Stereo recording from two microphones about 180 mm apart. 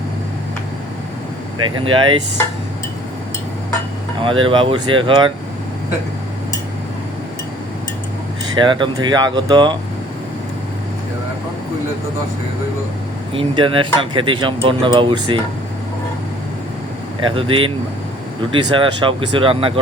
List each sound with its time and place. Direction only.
1.8 s speech: 30° right (ahead or behind)
4.2 s speech: 30° right (ahead or behind)
8.5 s speech: 25° right (ahead or behind)
13.3 s speech: 30° right (ahead or behind)
17.2 s speech: 30° right (ahead or behind)
18.7 s speech: 30° right (ahead or behind)